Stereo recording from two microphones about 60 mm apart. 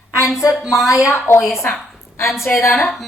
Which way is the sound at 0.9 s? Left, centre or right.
Left.